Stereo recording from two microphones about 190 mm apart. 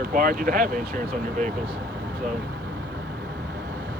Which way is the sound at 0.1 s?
50° right (ahead or behind).